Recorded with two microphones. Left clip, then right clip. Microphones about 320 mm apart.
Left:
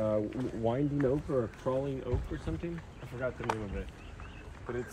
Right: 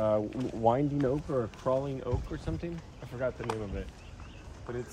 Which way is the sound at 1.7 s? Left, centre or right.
Right.